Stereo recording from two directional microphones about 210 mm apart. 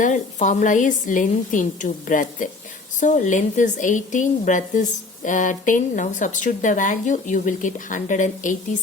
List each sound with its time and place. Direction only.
0.0 s a woman's voice: 35° left (ahead or behind)